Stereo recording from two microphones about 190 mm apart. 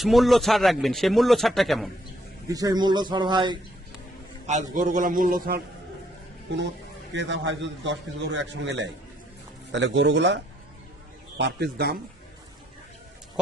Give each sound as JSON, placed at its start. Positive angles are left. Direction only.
{"t": 0.0, "sound": "a man's voice", "side_deg": 0}
{"t": 2.5, "sound": "a man's voice", "side_deg": -20}
{"t": 4.7, "sound": "a man's voice", "side_deg": -45}
{"t": 7.1, "sound": "a man's voice", "side_deg": -70}